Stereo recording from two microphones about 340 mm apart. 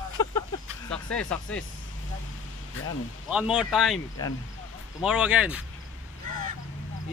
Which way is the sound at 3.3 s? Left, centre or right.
Centre.